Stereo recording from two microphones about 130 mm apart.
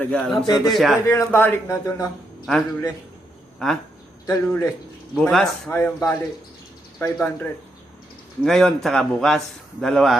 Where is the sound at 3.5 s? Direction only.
5° left (ahead or behind).